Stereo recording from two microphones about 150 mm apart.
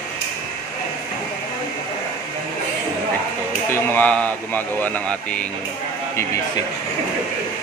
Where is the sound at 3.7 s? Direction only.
15° left (ahead or behind).